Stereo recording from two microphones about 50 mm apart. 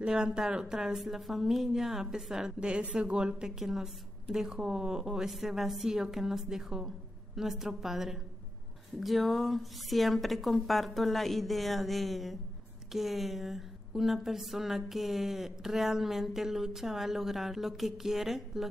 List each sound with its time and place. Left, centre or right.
0.0 s a woman's voice: centre